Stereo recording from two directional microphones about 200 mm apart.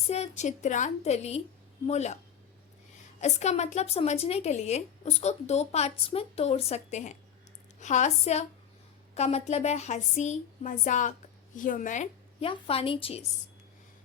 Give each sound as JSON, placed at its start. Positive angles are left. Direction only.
{"t": 0.1, "sound": "a woman's voice", "side_deg": 35}
{"t": 3.2, "sound": "a woman's voice", "side_deg": 35}